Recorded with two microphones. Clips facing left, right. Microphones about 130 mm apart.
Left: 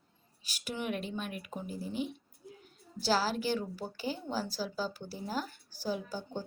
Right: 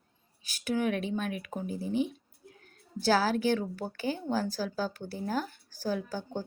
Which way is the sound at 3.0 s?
55° right (ahead or behind).